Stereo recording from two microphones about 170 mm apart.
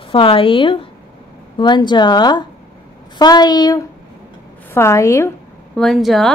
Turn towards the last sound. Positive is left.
turn(degrees=0)  # may be behind; listen again after turning